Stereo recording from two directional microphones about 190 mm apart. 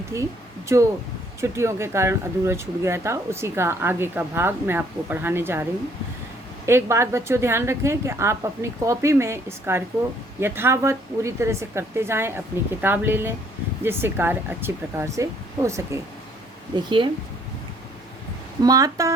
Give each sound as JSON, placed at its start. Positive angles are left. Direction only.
{"t": 0.1, "sound": "speech", "side_deg": -15}
{"t": 6.7, "sound": "speech", "side_deg": -15}
{"t": 18.6, "sound": "speech", "side_deg": -20}